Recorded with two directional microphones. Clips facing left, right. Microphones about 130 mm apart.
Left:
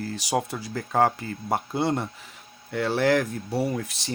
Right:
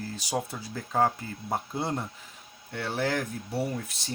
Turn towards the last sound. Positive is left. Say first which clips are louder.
# left 5 dB
turn(degrees=90)